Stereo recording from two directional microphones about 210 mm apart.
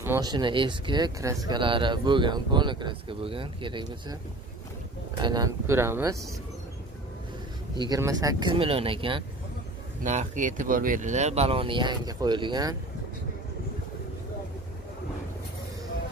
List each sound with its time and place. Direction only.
0.0 s speech: 15° right (ahead or behind)
7.8 s speech: 15° right (ahead or behind)